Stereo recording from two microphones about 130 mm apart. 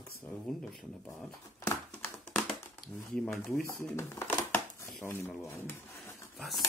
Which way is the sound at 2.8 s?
5° left (ahead or behind).